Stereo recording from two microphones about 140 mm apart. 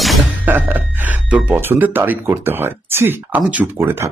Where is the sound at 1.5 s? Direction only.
15° right (ahead or behind).